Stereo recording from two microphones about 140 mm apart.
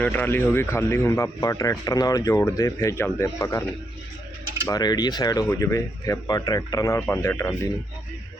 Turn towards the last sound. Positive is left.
turn(degrees=20)  # may be behind; listen again after turning